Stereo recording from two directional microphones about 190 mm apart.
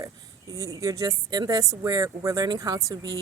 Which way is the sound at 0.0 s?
15° right (ahead or behind).